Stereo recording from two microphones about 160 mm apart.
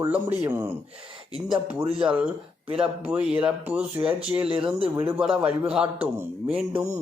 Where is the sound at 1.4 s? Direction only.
25° right (ahead or behind).